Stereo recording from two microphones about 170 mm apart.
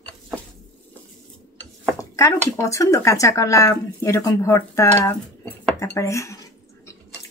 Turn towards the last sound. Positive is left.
turn(degrees=15)  # may be behind; listen again after turning